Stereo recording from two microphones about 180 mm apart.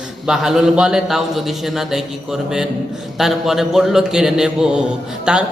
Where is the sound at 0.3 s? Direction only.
5° right (ahead or behind).